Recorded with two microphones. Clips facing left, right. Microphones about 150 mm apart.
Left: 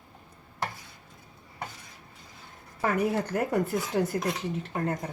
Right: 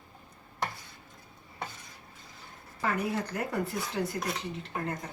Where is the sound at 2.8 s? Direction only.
50° left (ahead or behind).